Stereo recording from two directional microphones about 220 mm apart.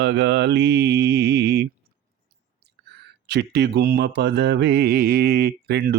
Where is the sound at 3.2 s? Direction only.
50° right (ahead or behind).